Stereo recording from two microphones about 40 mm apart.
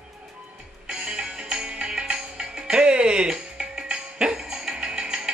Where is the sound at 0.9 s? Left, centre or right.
Centre.